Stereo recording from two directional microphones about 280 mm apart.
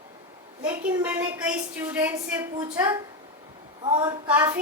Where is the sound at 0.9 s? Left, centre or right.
Centre.